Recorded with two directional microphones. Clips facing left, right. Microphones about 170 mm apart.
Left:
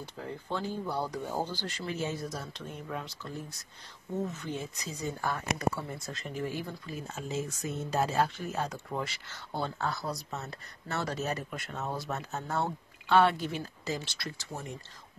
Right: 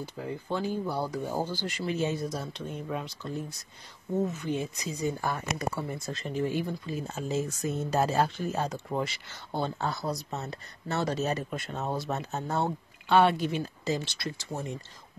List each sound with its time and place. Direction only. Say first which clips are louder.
0.0 s speech: right 4 dB; 5° right (ahead or behind)
4.4 s speech: right 6 dB; 15° right (ahead or behind)
6.0 s speech: right 6 dB; 30° right (ahead or behind)